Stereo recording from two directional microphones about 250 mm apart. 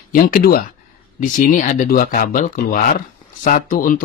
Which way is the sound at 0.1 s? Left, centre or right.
Left.